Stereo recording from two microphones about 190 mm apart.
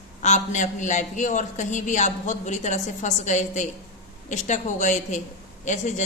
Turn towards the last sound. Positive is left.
turn(degrees=40)  # may be behind; listen again after turning